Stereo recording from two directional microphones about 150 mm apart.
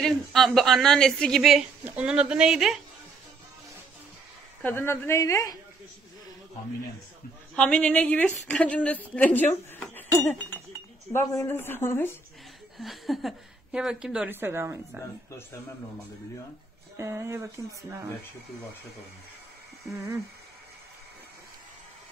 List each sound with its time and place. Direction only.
0.0 s a woman's voice: centre (ahead or behind)
4.6 s speech: 15° left (ahead or behind)
7.5 s speech: 5° left (ahead or behind)
12.7 s a woman's voice: centre (ahead or behind); by 14.8 s 15° right (ahead or behind)
16.9 s speech: 20° right (ahead or behind)